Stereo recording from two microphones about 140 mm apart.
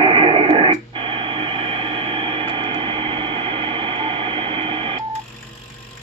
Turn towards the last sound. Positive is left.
turn(degrees=-40)  # may be behind; listen again after turning